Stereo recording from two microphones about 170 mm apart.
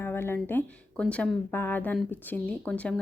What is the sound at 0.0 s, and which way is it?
A woman's voice, 15° left (ahead or behind).